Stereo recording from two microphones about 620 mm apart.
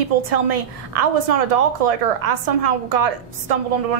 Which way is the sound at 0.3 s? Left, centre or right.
Right.